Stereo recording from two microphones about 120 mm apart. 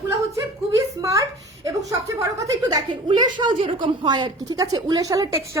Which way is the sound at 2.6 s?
40° right (ahead or behind).